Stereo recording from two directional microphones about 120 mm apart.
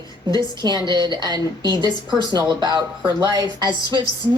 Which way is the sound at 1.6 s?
35° left (ahead or behind).